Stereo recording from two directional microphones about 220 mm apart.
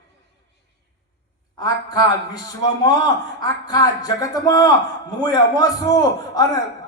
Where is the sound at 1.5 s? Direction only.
15° left (ahead or behind).